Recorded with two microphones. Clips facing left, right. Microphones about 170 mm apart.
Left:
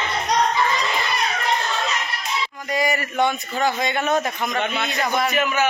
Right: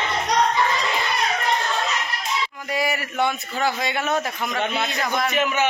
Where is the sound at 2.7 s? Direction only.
5° right (ahead or behind).